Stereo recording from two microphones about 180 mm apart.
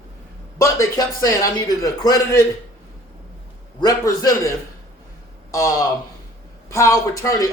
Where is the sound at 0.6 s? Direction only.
20° left (ahead or behind).